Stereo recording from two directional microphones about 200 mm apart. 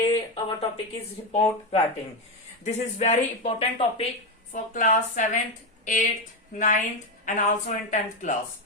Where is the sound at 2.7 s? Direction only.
35° left (ahead or behind).